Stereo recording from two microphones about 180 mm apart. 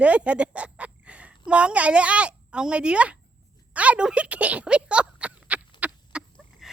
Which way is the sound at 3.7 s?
5° right (ahead or behind).